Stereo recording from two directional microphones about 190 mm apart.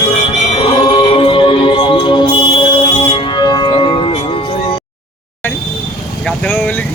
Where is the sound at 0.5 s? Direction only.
25° left (ahead or behind).